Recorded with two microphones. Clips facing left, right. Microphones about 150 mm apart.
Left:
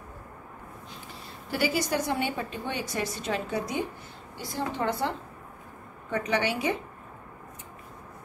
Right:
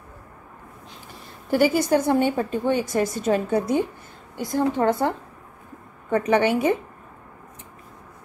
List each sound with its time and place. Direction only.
1.5 s a woman's voice: 50° right (ahead or behind)